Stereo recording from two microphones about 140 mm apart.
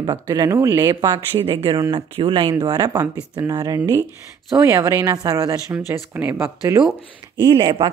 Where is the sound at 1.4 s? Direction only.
40° right (ahead or behind); by 6.8 s 20° right (ahead or behind).